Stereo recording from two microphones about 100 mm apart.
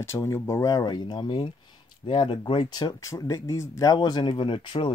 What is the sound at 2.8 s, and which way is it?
Speech, 35° left (ahead or behind).